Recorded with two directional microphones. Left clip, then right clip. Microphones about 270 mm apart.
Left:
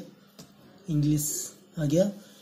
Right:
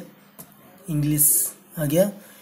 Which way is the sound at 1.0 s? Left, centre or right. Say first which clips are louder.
Right 5 dB; centre.